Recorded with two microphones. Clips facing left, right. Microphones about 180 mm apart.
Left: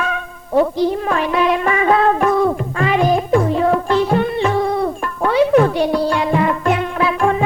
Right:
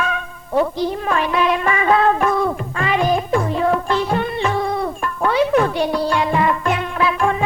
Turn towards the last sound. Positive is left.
turn(degrees=40)  # may be behind; listen again after turning